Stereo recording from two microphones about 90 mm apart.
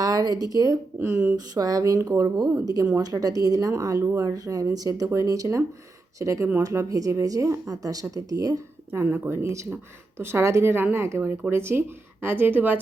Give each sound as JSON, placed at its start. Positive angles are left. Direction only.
{"t": 0.0, "sound": "speech", "side_deg": -45}
{"t": 0.9, "sound": "speech", "side_deg": -25}
{"t": 1.4, "sound": "speech", "side_deg": -45}
{"t": 8.9, "sound": "speech", "side_deg": -25}